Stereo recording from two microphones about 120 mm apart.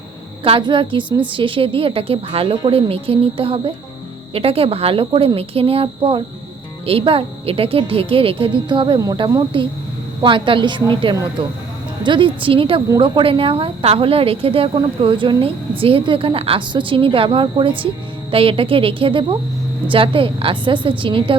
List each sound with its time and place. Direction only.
0.4 s a woman's voice: 45° right (ahead or behind)